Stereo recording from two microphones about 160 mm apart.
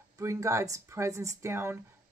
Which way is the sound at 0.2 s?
20° right (ahead or behind).